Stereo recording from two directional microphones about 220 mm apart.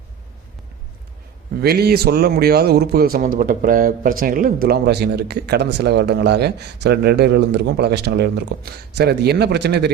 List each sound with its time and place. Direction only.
1.6 s a man's voice: 45° right (ahead or behind)